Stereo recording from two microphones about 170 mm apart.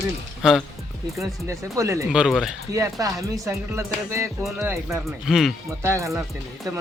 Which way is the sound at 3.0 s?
20° right (ahead or behind).